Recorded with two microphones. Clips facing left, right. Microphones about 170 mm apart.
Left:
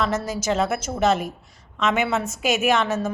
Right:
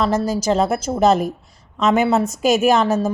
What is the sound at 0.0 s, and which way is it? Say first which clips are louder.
A woman's voice: right 5 dB; 35° right (ahead or behind).